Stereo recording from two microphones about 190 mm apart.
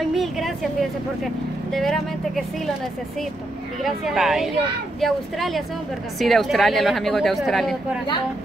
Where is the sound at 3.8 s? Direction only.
Centre (ahead or behind).